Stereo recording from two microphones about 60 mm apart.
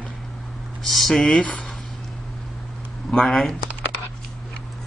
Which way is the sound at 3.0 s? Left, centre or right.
Centre.